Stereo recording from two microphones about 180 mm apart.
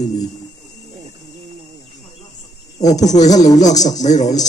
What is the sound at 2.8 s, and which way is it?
Speech, 20° left (ahead or behind).